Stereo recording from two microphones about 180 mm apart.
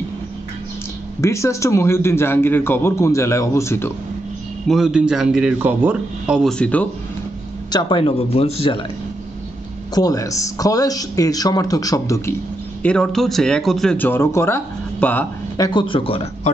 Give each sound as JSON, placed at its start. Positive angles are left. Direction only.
{"t": 1.2, "sound": "a man's voice", "side_deg": 15}
{"t": 4.6, "sound": "a man's voice", "side_deg": 0}
{"t": 6.6, "sound": "a man's voice", "side_deg": 10}
{"t": 7.7, "sound": "speech", "side_deg": 30}
{"t": 9.9, "sound": "speech", "side_deg": 20}
{"t": 12.8, "sound": "a man's voice", "side_deg": 5}
{"t": 15.5, "sound": "speech", "side_deg": 20}